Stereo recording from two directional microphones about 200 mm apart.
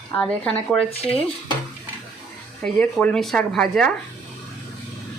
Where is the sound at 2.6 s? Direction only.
5° left (ahead or behind).